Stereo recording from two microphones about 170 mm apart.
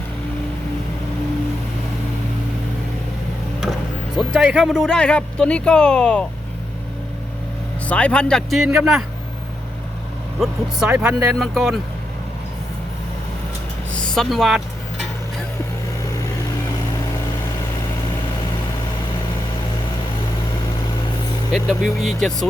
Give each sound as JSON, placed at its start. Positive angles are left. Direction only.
{"t": 4.2, "sound": "speech", "side_deg": -5}
{"t": 7.9, "sound": "speech", "side_deg": 5}
{"t": 10.4, "sound": "speech", "side_deg": 0}
{"t": 13.9, "sound": "speech", "side_deg": 5}
{"t": 21.5, "sound": "speech", "side_deg": 0}